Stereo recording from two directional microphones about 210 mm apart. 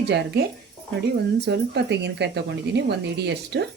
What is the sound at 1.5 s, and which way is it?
Speech, 55° right (ahead or behind).